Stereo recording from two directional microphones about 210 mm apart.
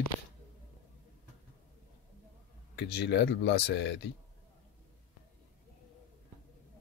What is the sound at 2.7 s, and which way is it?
Speech, 55° left (ahead or behind).